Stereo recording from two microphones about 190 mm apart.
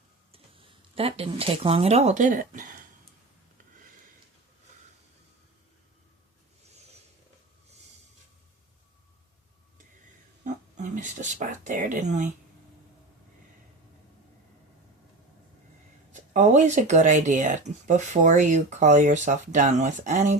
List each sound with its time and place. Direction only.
0.3 s speech: 30° right (ahead or behind); by 2.7 s 45° right (ahead or behind)
10.4 s speech: 40° right (ahead or behind)
16.3 s speech: 40° right (ahead or behind)